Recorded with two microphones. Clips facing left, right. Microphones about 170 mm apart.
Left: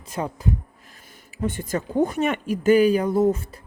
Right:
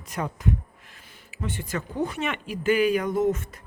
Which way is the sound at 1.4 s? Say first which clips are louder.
Left 5 dB; 45° left (ahead or behind).